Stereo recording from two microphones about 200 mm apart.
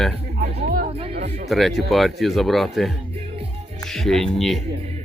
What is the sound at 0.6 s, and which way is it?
Music, 50° right (ahead or behind).